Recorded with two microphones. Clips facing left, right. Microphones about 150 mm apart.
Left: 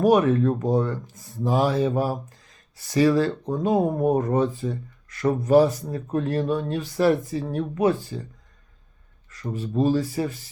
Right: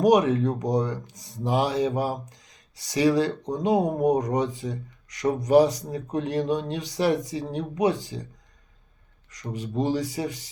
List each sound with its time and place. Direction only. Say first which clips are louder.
0.0 s speech: left 1 dB; 15° right (ahead or behind)
9.3 s speech: left 3 dB; 15° right (ahead or behind)